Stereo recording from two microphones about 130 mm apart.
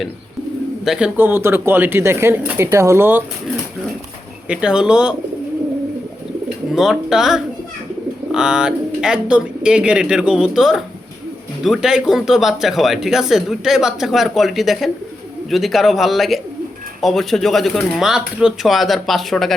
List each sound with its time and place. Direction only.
0.9 s speech: 10° right (ahead or behind)
4.4 s speech: 5° right (ahead or behind)
6.7 s speech: 5° right (ahead or behind)